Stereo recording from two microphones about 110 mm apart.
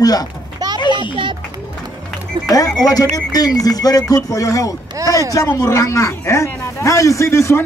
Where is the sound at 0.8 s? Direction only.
45° left (ahead or behind).